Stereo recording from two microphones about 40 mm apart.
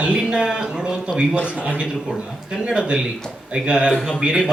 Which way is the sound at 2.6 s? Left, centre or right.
Right.